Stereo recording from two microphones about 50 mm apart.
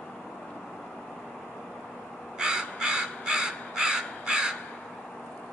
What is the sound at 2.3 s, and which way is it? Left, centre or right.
Crow, centre.